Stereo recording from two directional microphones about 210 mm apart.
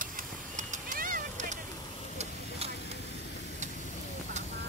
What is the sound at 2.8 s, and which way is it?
Vehicle, 55° left (ahead or behind).